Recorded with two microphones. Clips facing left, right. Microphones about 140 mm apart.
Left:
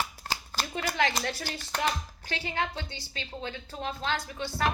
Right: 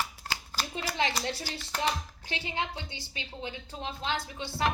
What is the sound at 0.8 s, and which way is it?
A woman's voice, 20° right (ahead or behind).